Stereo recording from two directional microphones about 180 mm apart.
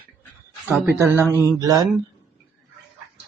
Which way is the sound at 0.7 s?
15° right (ahead or behind).